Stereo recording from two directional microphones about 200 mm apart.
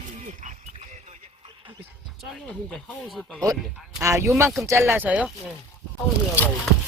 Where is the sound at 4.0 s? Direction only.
15° right (ahead or behind).